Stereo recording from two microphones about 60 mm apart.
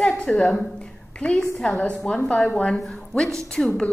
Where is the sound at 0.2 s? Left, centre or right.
Centre.